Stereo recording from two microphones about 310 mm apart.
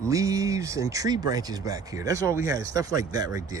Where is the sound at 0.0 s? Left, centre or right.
Centre.